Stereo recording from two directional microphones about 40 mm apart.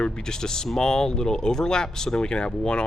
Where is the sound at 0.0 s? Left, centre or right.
Centre.